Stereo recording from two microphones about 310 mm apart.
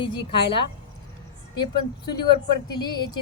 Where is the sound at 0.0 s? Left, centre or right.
Centre.